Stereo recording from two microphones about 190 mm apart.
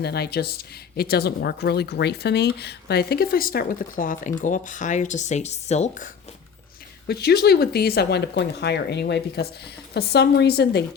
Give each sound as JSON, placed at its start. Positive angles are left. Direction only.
{"t": 0.0, "sound": "speech", "side_deg": 60}
{"t": 7.1, "sound": "speech", "side_deg": 55}